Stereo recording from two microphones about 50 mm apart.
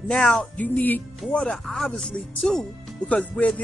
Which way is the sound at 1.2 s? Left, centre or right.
Centre.